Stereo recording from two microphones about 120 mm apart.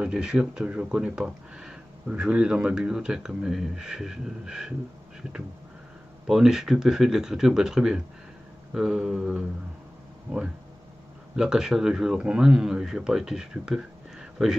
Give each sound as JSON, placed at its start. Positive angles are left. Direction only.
{"t": 0.0, "sound": "speech", "side_deg": -5}
{"t": 6.2, "sound": "speech", "side_deg": -5}